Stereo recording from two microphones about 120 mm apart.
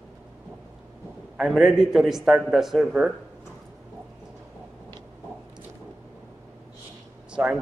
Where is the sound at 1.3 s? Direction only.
Centre (ahead or behind).